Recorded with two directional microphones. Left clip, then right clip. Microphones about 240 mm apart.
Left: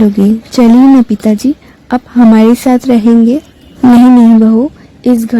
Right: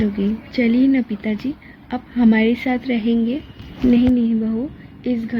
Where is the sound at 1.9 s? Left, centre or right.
Left.